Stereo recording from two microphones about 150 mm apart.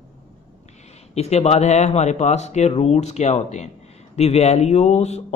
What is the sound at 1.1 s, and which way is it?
Speech, 45° left (ahead or behind).